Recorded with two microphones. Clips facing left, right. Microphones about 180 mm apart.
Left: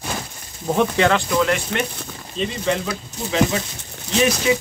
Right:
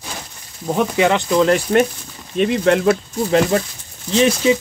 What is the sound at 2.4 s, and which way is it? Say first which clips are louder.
Speech: right 8 dB; 60° right (ahead or behind).